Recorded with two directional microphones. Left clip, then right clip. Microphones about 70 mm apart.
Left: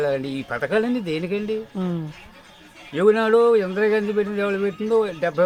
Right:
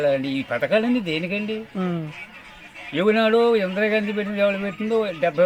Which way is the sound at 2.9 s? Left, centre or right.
Left.